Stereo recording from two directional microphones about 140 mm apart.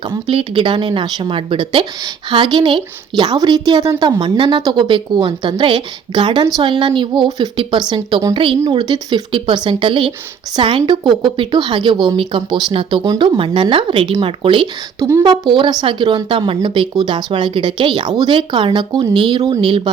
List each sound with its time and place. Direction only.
0.1 s speech: 40° right (ahead or behind)
14.9 s a woman's voice: 20° right (ahead or behind)
15.2 s speech: 35° right (ahead or behind)